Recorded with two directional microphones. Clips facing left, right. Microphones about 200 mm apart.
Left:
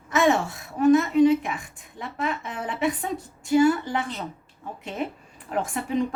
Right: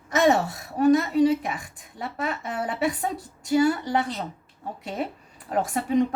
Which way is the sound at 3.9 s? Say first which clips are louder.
Right 3 dB; 35° right (ahead or behind).